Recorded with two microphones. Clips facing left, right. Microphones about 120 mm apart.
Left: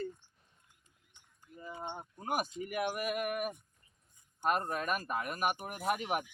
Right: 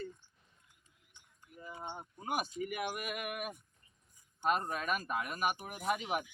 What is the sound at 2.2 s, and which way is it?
Speech, 45° left (ahead or behind).